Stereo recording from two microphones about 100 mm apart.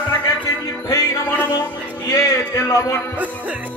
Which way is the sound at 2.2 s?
30° left (ahead or behind).